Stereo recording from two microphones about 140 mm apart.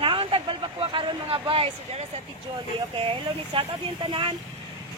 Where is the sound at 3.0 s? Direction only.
40° right (ahead or behind).